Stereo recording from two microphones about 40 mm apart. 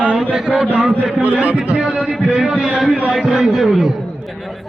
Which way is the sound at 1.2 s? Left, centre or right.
Right.